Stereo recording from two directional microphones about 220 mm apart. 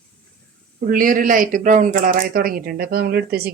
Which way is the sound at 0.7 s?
40° right (ahead or behind).